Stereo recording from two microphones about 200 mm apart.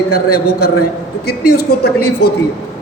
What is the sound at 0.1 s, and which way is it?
A man's voice, 50° left (ahead or behind).